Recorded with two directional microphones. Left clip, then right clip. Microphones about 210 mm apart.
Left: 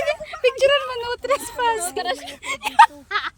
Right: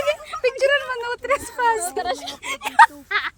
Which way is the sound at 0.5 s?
10° left (ahead or behind).